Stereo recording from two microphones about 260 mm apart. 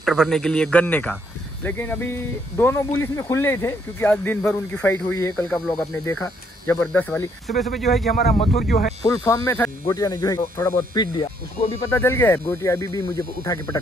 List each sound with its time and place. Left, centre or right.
0.0 s speech: centre
8.1 s speech: left
9.0 s speech: centre